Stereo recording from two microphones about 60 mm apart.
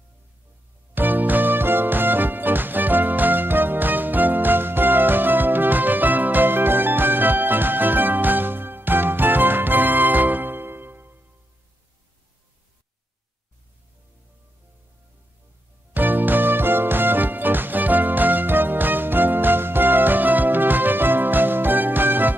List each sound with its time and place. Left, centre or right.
0.9 s music: right
15.9 s music: right